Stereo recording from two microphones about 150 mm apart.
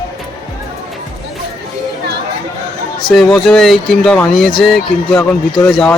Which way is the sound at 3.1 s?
Centre (ahead or behind).